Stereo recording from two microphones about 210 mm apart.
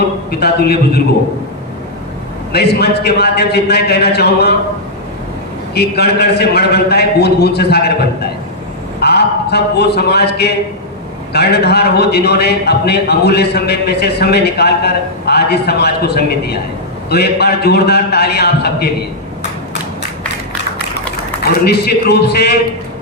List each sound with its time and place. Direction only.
0.3 s a man's voice: 50° left (ahead or behind)
2.5 s a man's voice: 50° left (ahead or behind)
5.7 s a man's voice: 50° left (ahead or behind)
21.6 s a man's voice: 50° left (ahead or behind)